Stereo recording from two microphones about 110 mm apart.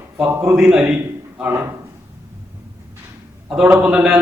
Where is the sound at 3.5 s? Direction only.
5° right (ahead or behind).